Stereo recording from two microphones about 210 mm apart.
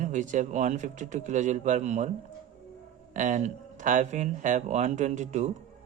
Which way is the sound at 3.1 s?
35° right (ahead or behind).